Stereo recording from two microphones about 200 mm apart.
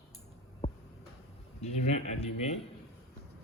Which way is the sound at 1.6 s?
35° left (ahead or behind).